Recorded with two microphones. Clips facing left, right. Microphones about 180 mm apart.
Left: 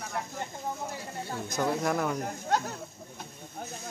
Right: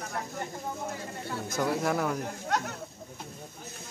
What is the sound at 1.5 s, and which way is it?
Speech, 5° right (ahead or behind).